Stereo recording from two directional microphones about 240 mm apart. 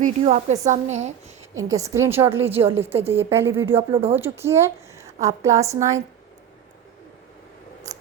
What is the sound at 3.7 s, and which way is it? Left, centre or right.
Speech, right.